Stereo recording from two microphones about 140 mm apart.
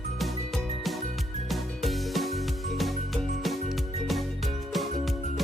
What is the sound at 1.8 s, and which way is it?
Music, centre (ahead or behind).